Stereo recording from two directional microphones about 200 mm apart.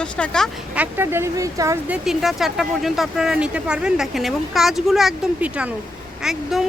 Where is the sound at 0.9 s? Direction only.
10° right (ahead or behind).